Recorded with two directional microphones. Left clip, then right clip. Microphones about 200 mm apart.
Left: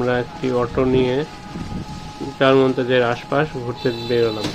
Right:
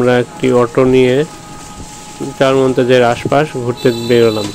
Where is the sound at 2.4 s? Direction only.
35° right (ahead or behind).